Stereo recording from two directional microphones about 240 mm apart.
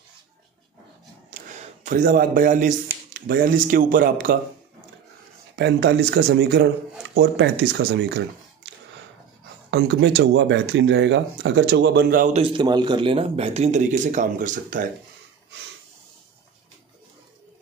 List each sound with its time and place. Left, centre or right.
1.3 s a man's voice: right
5.6 s speech: right
9.7 s speech: right